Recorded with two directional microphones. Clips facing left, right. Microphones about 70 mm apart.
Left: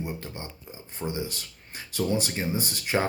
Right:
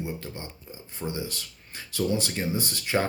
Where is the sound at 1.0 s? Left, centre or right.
Left.